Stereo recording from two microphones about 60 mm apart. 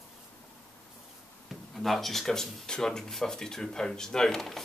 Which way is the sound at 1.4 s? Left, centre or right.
Centre.